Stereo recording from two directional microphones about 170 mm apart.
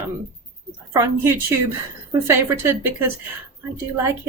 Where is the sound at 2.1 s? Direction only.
15° right (ahead or behind).